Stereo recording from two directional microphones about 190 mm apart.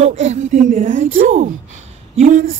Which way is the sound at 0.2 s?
35° right (ahead or behind).